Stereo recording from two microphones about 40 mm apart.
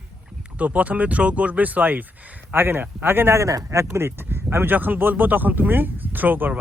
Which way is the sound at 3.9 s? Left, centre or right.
Right.